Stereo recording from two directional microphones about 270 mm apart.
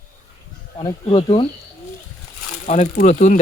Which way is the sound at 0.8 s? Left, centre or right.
Centre.